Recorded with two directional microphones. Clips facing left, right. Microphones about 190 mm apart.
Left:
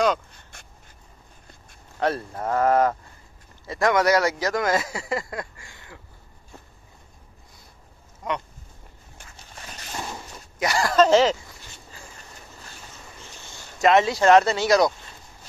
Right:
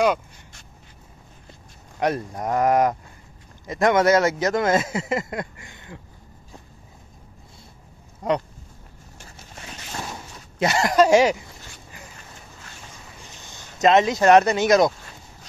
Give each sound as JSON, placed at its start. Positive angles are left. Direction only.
{"t": 2.0, "sound": "speech", "side_deg": -15}
{"t": 8.2, "sound": "speech", "side_deg": -35}
{"t": 10.6, "sound": "speech", "side_deg": -20}
{"t": 13.4, "sound": "speech", "side_deg": -20}